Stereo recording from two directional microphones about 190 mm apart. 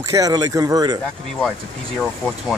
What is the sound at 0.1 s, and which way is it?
Speech, 20° right (ahead or behind).